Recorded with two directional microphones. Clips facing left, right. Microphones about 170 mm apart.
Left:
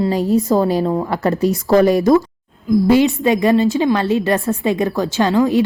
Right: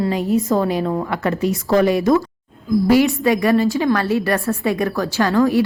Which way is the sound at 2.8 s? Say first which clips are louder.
Left 1 dB; 20° left (ahead or behind).